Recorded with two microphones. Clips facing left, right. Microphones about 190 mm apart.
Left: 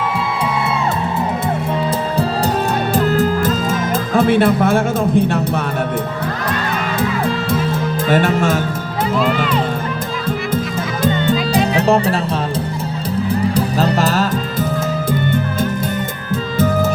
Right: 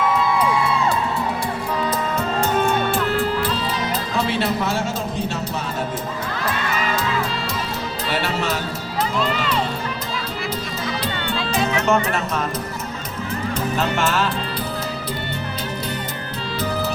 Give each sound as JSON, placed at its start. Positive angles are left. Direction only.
{"t": 2.1, "sound": "music", "side_deg": 35}
{"t": 7.2, "sound": "music", "side_deg": 55}
{"t": 11.0, "sound": "music", "side_deg": 45}
{"t": 13.7, "sound": "music", "side_deg": 35}
{"t": 16.6, "sound": "music", "side_deg": 45}